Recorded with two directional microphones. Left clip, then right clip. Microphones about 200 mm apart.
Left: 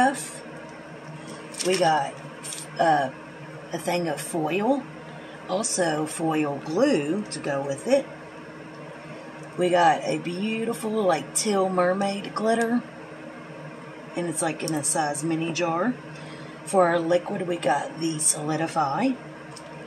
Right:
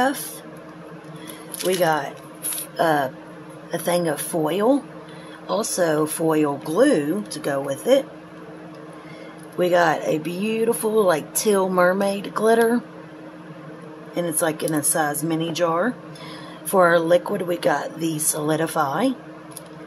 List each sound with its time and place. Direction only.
1.8 s speech: 35° right (ahead or behind)
9.6 s speech: 35° right (ahead or behind)
14.1 s speech: 35° right (ahead or behind)